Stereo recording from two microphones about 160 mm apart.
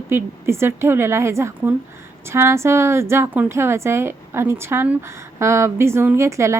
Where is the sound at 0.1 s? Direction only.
15° right (ahead or behind).